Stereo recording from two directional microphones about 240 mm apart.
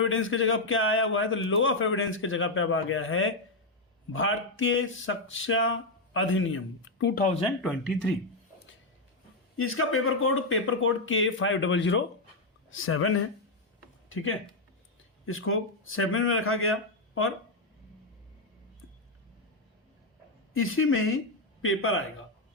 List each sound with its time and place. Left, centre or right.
0.0 s a man's voice: left
7.0 s speech: left
7.6 s speech: centre
9.6 s a man's voice: left
12.7 s a man's voice: left
20.6 s a man's voice: left